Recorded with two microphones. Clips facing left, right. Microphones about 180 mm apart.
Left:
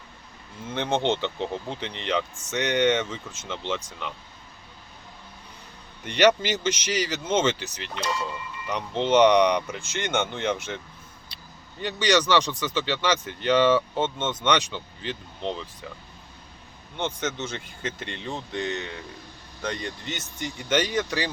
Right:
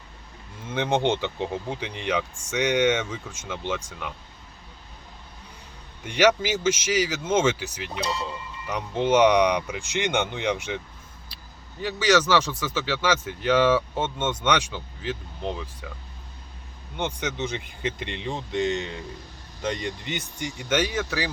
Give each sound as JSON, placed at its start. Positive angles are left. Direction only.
{"t": 0.7, "sound": "speech", "side_deg": -15}
{"t": 6.0, "sound": "speech", "side_deg": -10}
{"t": 8.0, "sound": "speech", "side_deg": -35}
{"t": 8.6, "sound": "speech", "side_deg": -10}
{"t": 11.8, "sound": "speech", "side_deg": -5}
{"t": 17.0, "sound": "speech", "side_deg": -15}
{"t": 19.6, "sound": "speech", "side_deg": -15}